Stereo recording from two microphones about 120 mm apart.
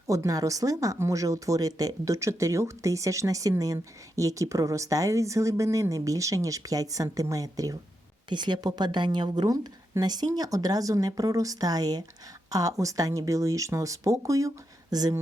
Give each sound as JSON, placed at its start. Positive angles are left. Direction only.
{"t": 0.1, "sound": "a woman's voice", "side_deg": -30}